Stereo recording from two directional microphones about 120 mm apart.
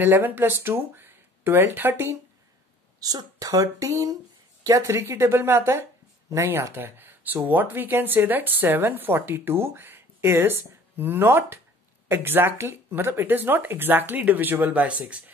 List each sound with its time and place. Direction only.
0.0 s speech: 15° right (ahead or behind)
3.0 s speech: 30° right (ahead or behind); by 15.3 s 10° right (ahead or behind)